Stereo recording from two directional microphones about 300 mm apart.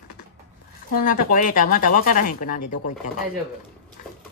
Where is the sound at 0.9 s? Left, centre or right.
Left.